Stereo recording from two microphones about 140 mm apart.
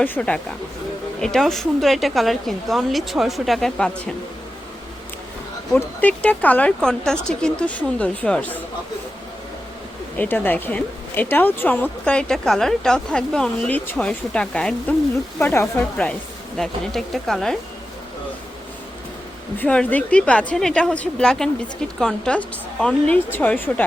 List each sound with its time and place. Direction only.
0.0 s a woman's voice: 10° left (ahead or behind)
5.7 s speech: 10° left (ahead or behind)
10.2 s speech: 15° left (ahead or behind)
15.4 s speech: 15° left (ahead or behind)
16.6 s a woman's voice: centre (ahead or behind)
19.5 s speech: 10° left (ahead or behind)